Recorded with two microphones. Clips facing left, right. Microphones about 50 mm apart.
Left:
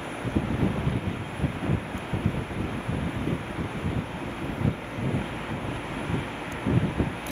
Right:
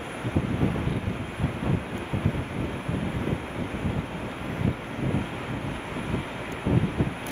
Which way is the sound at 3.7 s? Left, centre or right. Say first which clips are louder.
Right 1 dB; right.